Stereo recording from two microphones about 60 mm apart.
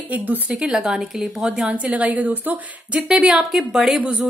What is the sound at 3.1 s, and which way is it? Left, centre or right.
Speech, centre.